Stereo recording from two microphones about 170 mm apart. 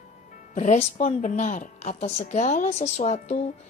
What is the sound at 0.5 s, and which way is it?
A woman's voice, 45° left (ahead or behind).